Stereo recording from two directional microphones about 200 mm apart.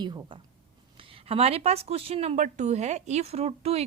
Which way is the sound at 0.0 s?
20° right (ahead or behind).